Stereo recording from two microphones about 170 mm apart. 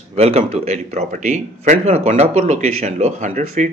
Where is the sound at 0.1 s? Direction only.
40° right (ahead or behind).